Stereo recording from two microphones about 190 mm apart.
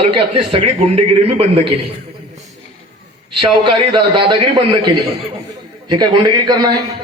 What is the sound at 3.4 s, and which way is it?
A man's voice, 25° right (ahead or behind).